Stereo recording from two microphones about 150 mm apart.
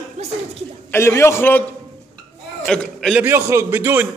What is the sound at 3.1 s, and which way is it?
Speech, 15° right (ahead or behind).